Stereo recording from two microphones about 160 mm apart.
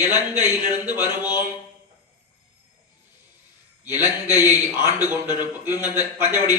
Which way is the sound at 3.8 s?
15° right (ahead or behind).